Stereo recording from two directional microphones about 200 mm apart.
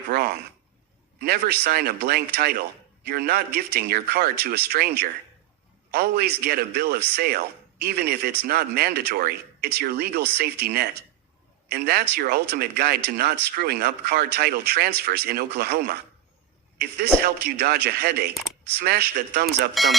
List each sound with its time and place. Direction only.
0.1 s speech: 50° right (ahead or behind)
17.2 s speech: 50° right (ahead or behind)
19.7 s speech: centre (ahead or behind)